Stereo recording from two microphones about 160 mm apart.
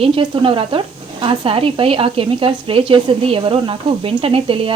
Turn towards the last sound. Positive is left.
turn(degrees=-35)  # may be behind; listen again after turning